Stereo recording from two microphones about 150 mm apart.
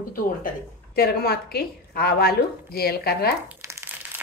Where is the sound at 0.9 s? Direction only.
90° left.